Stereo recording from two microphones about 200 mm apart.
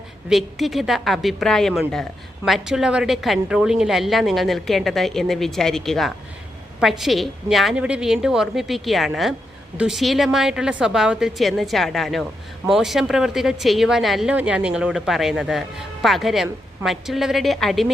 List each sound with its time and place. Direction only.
0.3 s a woman's voice: centre (ahead or behind)